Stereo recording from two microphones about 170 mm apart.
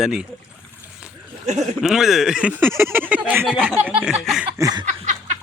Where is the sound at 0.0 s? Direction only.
5° right (ahead or behind).